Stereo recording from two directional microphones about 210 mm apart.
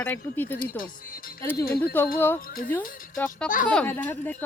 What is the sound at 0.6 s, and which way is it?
Speech, 45° left (ahead or behind).